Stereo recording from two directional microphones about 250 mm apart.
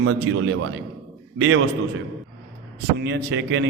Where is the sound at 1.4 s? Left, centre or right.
Right.